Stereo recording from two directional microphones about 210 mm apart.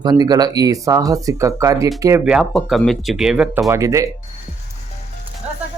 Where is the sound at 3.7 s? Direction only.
15° right (ahead or behind).